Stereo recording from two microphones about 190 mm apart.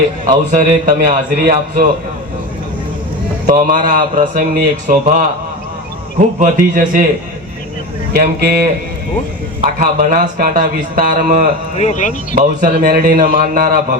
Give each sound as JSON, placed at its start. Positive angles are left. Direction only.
{"t": 0.3, "sound": "a man's voice", "side_deg": -40}
{"t": 3.4, "sound": "a man's voice", "side_deg": -45}
{"t": 8.1, "sound": "speech", "side_deg": -55}
{"t": 9.7, "sound": "a man's voice", "side_deg": -45}
{"t": 11.8, "sound": "speech", "side_deg": 40}
{"t": 12.4, "sound": "a man's voice", "side_deg": -45}